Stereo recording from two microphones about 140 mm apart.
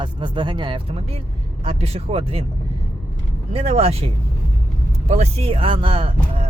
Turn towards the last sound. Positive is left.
turn(degrees=-40)  # may be behind; listen again after turning